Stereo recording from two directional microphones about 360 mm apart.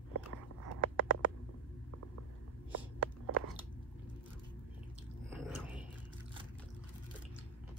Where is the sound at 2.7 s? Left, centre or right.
Right.